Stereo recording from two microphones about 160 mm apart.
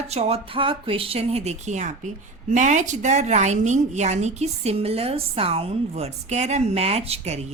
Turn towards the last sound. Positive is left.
turn(degrees=-40)  # may be behind; listen again after turning